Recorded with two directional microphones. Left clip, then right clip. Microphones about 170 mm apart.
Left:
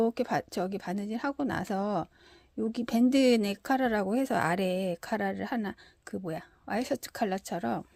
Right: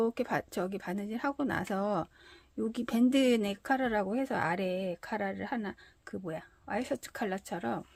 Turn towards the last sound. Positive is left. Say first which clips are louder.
# left 3 dB
turn(degrees=40)  # may be behind; listen again after turning